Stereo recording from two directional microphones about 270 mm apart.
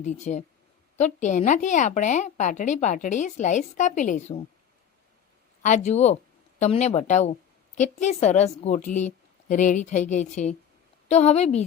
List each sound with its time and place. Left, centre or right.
0.0 s a woman's voice: left
5.6 s a woman's voice: left